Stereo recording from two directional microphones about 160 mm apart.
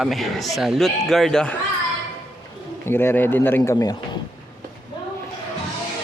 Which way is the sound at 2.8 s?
15° left (ahead or behind).